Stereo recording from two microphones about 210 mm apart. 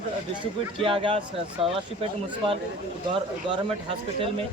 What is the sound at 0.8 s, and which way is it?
Speech, 25° right (ahead or behind).